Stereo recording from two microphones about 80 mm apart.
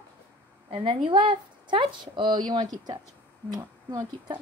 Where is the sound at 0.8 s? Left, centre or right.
Right.